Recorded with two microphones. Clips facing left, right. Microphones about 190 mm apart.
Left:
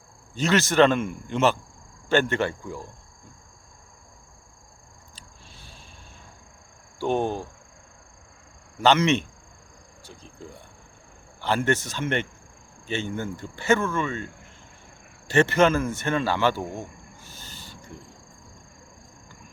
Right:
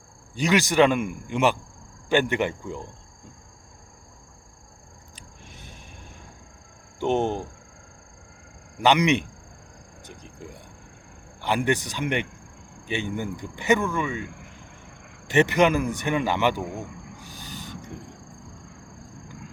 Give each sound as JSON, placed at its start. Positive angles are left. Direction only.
{"t": 0.3, "sound": "speech", "side_deg": -15}
{"t": 5.1, "sound": "wild animals", "side_deg": -20}
{"t": 7.0, "sound": "speech", "side_deg": -20}
{"t": 8.8, "sound": "speech", "side_deg": -15}
{"t": 15.3, "sound": "speech", "side_deg": -15}